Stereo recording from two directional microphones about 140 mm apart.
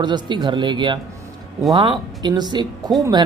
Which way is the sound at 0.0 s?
30° right (ahead or behind).